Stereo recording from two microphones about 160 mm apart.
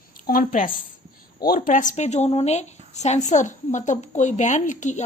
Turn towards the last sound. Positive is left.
turn(degrees=50)  # may be behind; listen again after turning